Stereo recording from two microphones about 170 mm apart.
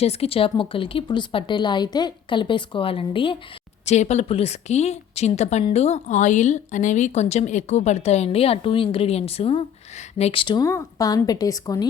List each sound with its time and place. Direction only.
0.0 s a woman's voice: 35° left (ahead or behind)
3.8 s a woman's voice: 40° left (ahead or behind); by 11.9 s 20° left (ahead or behind)